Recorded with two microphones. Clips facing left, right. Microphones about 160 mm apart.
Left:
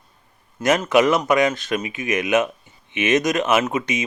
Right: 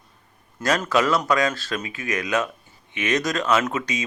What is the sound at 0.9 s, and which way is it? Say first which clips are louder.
Speech: left 4 dB; 20° left (ahead or behind).